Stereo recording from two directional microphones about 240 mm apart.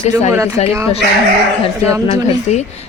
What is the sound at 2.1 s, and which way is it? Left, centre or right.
Speech, left.